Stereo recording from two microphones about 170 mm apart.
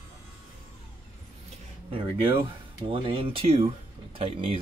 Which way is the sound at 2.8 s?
30° right (ahead or behind).